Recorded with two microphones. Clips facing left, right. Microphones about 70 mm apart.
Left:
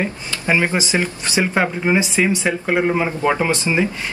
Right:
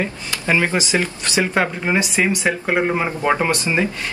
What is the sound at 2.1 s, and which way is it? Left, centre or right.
Speech, centre.